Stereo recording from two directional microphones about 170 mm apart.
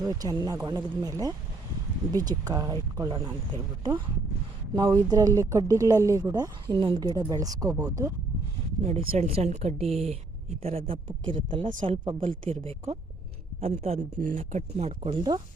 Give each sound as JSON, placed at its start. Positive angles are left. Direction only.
{"t": 0.0, "sound": "speech", "side_deg": -20}
{"t": 8.8, "sound": "a woman's voice", "side_deg": -40}
{"t": 14.2, "sound": "speech", "side_deg": -50}
{"t": 14.8, "sound": "a woman's voice", "side_deg": -35}